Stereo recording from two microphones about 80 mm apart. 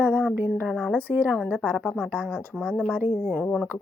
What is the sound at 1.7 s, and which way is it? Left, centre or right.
Speech, centre.